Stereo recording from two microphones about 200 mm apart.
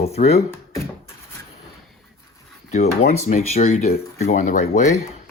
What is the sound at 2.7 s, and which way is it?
Speech, 35° left (ahead or behind).